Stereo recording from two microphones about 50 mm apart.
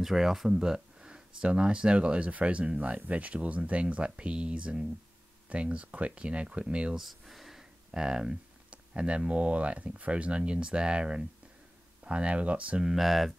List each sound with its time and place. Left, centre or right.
0.0 s speech: centre; by 7.0 s right
7.0 s a sound: centre
7.9 s speech: centre
8.6 s a sound: right
9.3 s speech: right
12.8 s speech: centre